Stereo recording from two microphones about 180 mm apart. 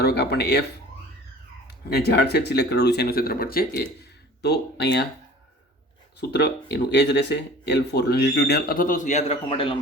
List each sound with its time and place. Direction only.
0.0 s speech: 65° left (ahead or behind)
1.6 s speech: 65° left (ahead or behind)
4.4 s speech: 70° left (ahead or behind)
6.1 s speech: 65° left (ahead or behind); by 9.7 s 30° left (ahead or behind)